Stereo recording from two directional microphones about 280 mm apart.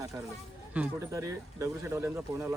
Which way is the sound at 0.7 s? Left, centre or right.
Centre.